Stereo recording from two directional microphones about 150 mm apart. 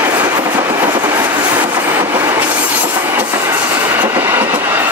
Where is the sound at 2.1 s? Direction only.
25° right (ahead or behind).